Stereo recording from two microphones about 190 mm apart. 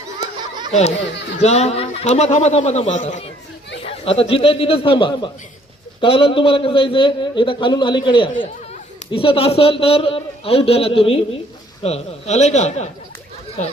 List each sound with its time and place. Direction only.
0.7 s a man's voice: 35° left (ahead or behind)